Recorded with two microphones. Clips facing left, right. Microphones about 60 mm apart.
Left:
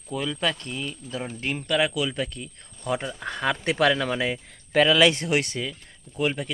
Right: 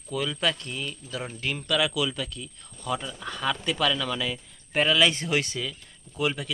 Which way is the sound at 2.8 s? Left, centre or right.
Left.